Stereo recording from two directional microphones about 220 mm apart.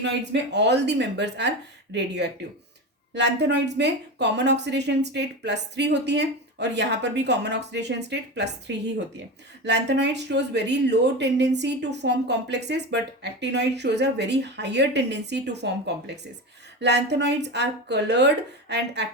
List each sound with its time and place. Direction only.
0.5 s speech: 50° right (ahead or behind)